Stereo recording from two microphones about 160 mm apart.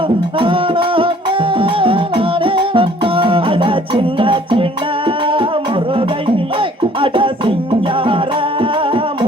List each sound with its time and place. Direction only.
0.3 s music: 35° right (ahead or behind)